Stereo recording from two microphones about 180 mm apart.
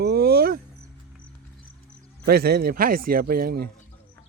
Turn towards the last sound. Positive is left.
turn(degrees=-55)  # may be behind; listen again after turning